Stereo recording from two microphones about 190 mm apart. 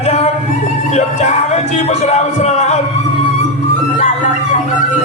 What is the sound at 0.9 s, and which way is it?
Speech, 35° left (ahead or behind).